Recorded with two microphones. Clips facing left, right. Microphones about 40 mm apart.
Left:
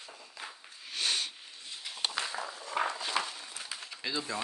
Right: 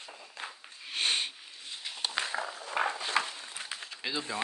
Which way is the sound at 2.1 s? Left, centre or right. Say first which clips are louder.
Right 2 dB; right.